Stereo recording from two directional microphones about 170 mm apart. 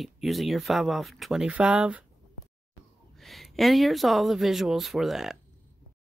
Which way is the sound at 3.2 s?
Centre (ahead or behind).